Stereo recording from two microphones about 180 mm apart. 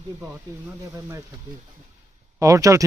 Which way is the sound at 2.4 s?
20° right (ahead or behind).